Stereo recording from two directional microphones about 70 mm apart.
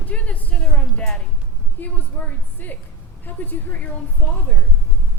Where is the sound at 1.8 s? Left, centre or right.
Left.